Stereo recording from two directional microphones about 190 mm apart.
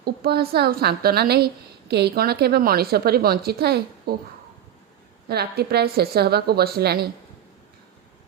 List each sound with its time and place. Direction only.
0.0 s a woman's voice: 55° right (ahead or behind)
5.3 s a woman's voice: 55° right (ahead or behind)